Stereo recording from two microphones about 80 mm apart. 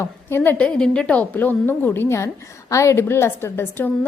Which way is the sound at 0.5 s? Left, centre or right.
Centre.